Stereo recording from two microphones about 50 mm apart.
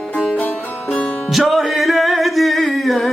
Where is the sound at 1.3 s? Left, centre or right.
Centre.